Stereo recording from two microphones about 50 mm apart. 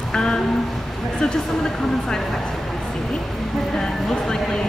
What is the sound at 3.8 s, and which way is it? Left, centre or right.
Speech, centre.